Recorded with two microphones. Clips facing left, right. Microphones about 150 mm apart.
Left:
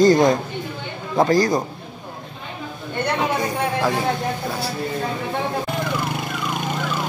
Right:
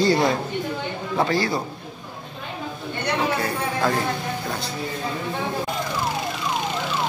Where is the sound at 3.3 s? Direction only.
15° left (ahead or behind).